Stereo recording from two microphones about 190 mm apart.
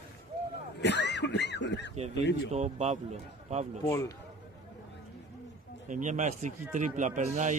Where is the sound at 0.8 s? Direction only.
65° left (ahead or behind).